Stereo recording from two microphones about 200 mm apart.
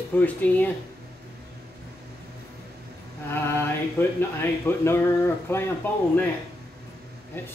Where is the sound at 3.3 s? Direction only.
10° left (ahead or behind).